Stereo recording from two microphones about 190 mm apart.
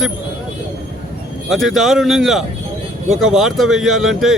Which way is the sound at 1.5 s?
Centre (ahead or behind).